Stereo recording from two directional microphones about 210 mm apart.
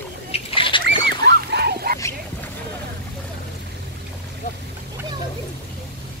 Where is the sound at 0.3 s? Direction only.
25° left (ahead or behind).